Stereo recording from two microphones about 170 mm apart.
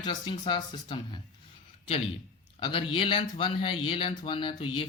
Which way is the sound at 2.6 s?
30° left (ahead or behind).